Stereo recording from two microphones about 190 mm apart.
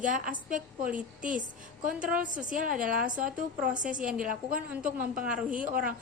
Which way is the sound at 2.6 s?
45° right (ahead or behind).